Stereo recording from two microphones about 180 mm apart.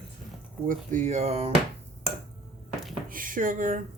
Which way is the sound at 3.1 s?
50° right (ahead or behind).